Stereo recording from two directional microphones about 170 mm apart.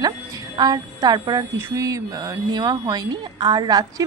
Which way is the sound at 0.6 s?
25° right (ahead or behind).